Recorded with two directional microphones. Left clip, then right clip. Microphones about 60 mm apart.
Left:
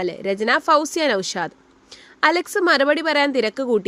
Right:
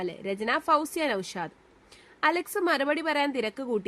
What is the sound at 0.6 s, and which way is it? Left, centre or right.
Speech, left.